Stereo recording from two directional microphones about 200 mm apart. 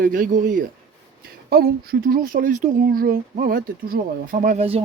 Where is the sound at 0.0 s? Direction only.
40° right (ahead or behind).